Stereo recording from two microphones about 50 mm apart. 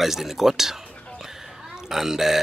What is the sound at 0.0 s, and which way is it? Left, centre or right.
Speech, centre.